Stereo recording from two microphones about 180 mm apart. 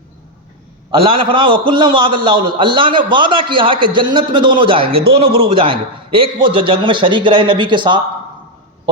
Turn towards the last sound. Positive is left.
turn(degrees=-25)  # may be behind; listen again after turning